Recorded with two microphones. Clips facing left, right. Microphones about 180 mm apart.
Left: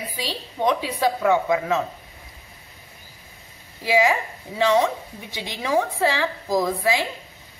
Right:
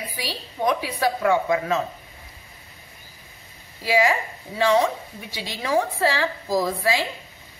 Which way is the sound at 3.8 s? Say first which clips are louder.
Left 1 dB; 15° left (ahead or behind).